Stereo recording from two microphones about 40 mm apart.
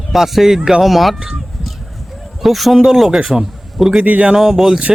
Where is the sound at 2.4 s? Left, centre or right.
Centre.